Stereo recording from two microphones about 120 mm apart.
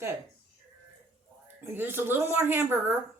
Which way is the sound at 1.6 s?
20° right (ahead or behind).